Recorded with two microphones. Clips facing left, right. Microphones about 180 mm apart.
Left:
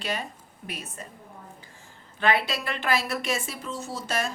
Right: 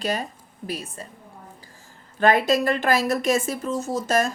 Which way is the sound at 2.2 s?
45° right (ahead or behind).